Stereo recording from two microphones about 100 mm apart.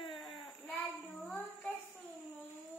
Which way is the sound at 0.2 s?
5° left (ahead or behind).